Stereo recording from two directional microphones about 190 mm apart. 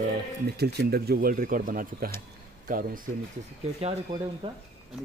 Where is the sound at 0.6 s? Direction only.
55° right (ahead or behind).